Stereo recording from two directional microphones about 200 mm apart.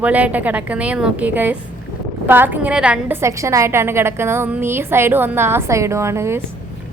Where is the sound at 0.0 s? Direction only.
5° right (ahead or behind).